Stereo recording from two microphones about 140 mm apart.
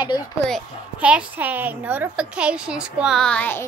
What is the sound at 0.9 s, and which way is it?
A woman's voice, 10° right (ahead or behind).